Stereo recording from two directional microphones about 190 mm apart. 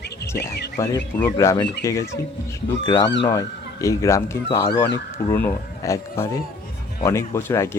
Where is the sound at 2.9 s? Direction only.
20° left (ahead or behind).